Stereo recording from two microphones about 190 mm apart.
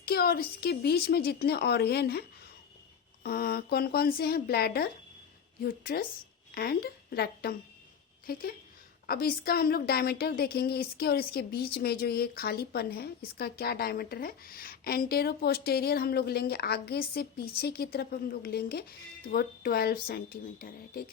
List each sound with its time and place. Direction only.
0.0 s a woman's voice: 55° left (ahead or behind)
3.2 s a woman's voice: 55° left (ahead or behind)